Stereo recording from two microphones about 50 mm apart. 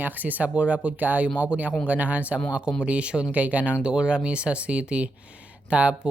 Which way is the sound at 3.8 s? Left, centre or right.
Centre.